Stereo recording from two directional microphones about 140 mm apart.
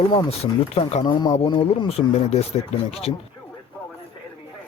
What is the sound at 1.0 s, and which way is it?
Speech, 35° left (ahead or behind).